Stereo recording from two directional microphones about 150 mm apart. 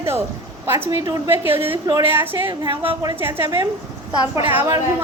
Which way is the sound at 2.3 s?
30° right (ahead or behind).